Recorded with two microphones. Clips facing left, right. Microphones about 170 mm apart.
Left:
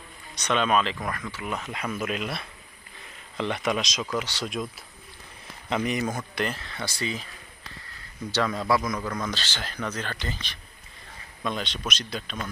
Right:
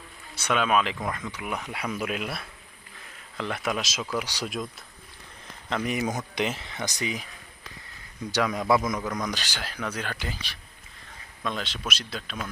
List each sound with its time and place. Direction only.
0.3 s speech: 5° right (ahead or behind)
1.0 s speech: 20° right (ahead or behind); by 6.1 s centre (ahead or behind)
6.1 s speech: 15° right (ahead or behind)
8.3 s speech: 15° right (ahead or behind)
11.4 s speech: centre (ahead or behind)